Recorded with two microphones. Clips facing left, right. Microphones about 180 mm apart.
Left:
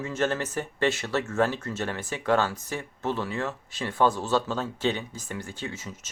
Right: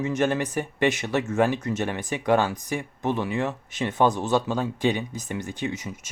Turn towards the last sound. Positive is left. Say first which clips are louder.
# right 6 dB
turn(degrees=-15)  # may be behind; listen again after turning